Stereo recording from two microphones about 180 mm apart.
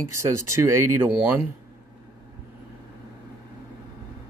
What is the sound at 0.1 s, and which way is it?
Speech, 15° right (ahead or behind).